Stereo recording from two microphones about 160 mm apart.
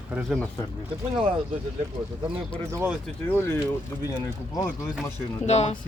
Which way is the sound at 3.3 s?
15° left (ahead or behind).